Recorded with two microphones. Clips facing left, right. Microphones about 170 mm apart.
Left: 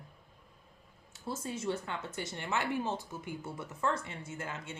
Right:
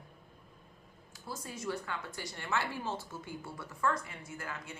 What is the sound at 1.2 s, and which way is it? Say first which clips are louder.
Speech: left 4 dB; 25° left (ahead or behind).